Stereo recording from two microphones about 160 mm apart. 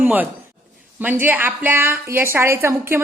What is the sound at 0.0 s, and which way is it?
A woman's voice, 10° right (ahead or behind).